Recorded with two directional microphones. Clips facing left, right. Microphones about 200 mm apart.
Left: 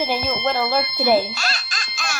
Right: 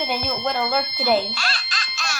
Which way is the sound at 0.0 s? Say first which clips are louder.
Left 3 dB; 5° left (ahead or behind).